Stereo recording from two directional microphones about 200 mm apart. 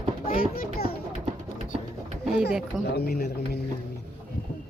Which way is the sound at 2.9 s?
50° left (ahead or behind).